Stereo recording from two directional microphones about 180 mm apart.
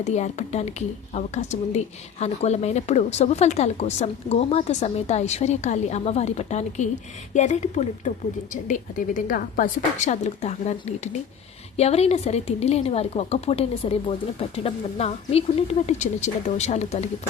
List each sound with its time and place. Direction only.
0.0 s a woman's voice: 40° left (ahead or behind)